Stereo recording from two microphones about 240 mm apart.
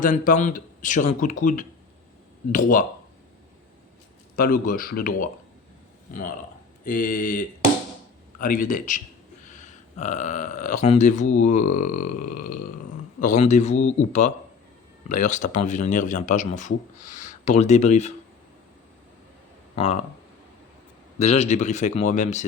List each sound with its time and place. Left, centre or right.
0.0 s speech: left
4.4 s speech: left
6.8 s a man's voice: left
19.7 s speech: left
21.2 s a man's voice: left